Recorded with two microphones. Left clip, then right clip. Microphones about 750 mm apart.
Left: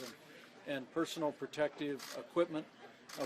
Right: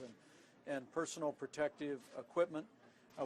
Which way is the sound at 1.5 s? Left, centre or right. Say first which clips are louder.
Left 3 dB; left.